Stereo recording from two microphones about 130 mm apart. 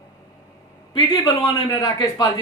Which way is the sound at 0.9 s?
35° left (ahead or behind).